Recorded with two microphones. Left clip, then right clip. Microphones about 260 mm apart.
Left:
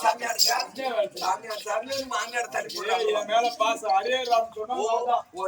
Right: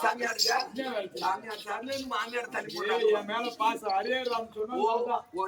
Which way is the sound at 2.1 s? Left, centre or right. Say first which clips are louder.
Left 4 dB; centre.